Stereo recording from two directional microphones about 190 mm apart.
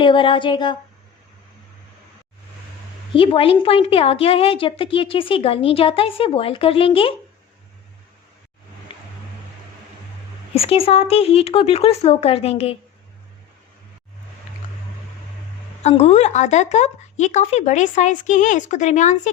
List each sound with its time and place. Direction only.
0.0 s a woman's voice: 25° left (ahead or behind)
3.1 s a woman's voice: 25° left (ahead or behind)
8.9 s vehicle: 30° left (ahead or behind)
10.5 s speech: 30° left (ahead or behind)
14.5 s a sound: 40° left (ahead or behind)
15.8 s speech: 35° left (ahead or behind)